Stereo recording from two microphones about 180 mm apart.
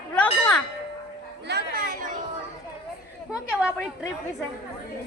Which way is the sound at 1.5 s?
65° right (ahead or behind).